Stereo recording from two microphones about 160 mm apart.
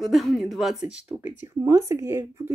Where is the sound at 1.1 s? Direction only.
20° right (ahead or behind).